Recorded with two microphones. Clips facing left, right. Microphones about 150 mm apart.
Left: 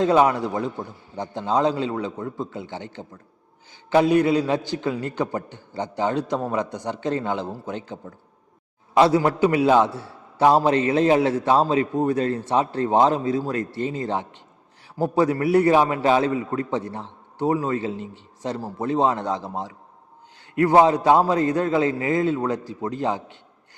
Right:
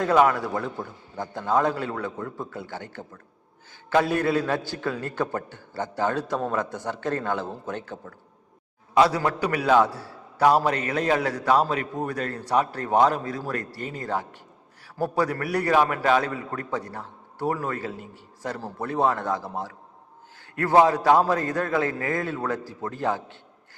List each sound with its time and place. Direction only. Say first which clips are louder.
0.0 s a man's voice: left 2 dB; 20° left (ahead or behind)